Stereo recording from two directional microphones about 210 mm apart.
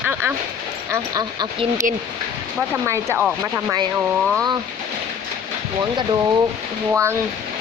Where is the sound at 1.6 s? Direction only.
35° right (ahead or behind).